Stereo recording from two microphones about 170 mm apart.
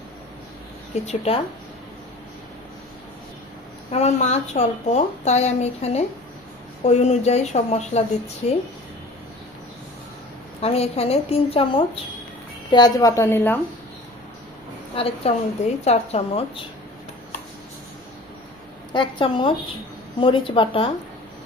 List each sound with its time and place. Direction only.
1.0 s a woman's voice: 35° left (ahead or behind)
3.9 s a woman's voice: 40° left (ahead or behind)
10.6 s a woman's voice: 35° left (ahead or behind)
12.7 s a woman's voice: 20° left (ahead or behind)
14.9 s a woman's voice: 35° left (ahead or behind)
18.9 s a woman's voice: 30° left (ahead or behind)